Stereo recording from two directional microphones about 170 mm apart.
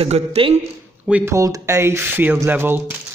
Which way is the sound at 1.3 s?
20° right (ahead or behind).